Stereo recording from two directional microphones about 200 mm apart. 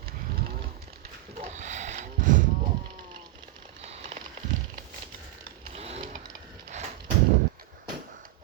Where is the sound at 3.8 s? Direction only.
30° right (ahead or behind).